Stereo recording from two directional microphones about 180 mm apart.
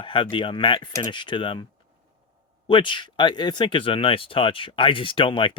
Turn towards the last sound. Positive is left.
turn(degrees=30)  # may be behind; listen again after turning